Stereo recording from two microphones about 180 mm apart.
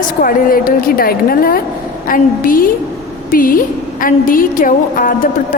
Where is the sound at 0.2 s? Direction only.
50° left (ahead or behind).